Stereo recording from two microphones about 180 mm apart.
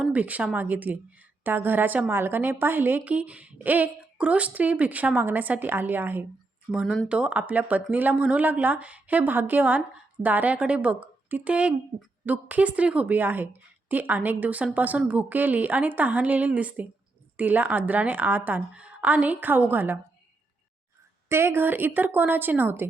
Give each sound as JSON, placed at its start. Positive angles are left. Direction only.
{"t": 0.0, "sound": "a woman's voice", "side_deg": -10}
{"t": 21.2, "sound": "a woman's voice", "side_deg": -15}